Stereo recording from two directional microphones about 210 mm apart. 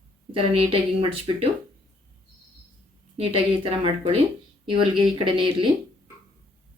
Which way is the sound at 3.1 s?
30° right (ahead or behind).